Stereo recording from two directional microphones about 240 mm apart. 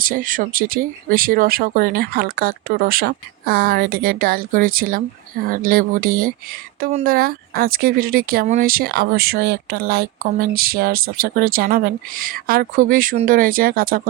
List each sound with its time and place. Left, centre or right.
0.0 s speech: right